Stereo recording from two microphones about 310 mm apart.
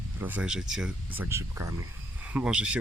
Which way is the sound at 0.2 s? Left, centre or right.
Centre.